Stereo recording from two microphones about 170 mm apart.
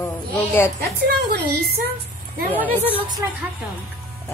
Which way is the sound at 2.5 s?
10° left (ahead or behind).